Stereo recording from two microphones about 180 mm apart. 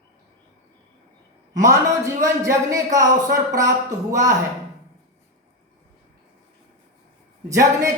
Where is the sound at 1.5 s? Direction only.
20° right (ahead or behind).